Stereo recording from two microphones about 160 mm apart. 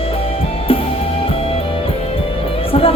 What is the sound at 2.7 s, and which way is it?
Music, 35° left (ahead or behind).